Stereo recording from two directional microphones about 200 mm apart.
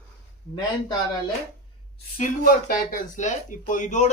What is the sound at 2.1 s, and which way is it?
A man's voice, 45° left (ahead or behind).